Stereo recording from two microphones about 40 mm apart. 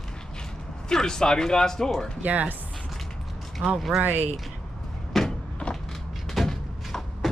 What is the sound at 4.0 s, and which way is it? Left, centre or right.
Speech, right.